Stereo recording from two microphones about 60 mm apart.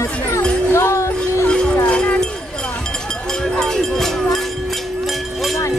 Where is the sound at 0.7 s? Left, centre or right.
Left.